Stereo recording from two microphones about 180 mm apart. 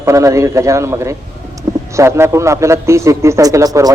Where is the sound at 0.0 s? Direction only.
15° right (ahead or behind).